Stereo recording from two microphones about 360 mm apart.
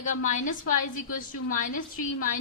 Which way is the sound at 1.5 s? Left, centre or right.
Left.